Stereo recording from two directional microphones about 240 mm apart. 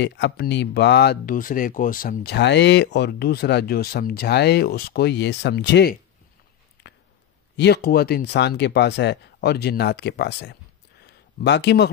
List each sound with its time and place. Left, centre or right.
0.0 s speech: left
7.5 s speech: left